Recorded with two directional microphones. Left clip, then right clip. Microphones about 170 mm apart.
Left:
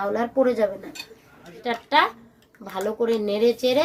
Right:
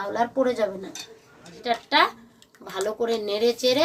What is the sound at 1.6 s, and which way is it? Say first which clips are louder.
Speech: even; 45° left (ahead or behind).